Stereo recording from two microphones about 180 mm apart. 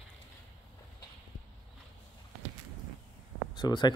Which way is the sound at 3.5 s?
25° left (ahead or behind).